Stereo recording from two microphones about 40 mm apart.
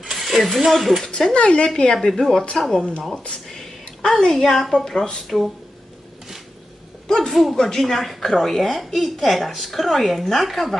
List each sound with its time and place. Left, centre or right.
0.0 s speech: centre
1.1 s speech: left
1.6 s speech: centre
2.7 s speech: left
3.5 s a sound: centre
4.4 s a woman's voice: centre
5.3 s speech: centre
7.1 s a woman's voice: centre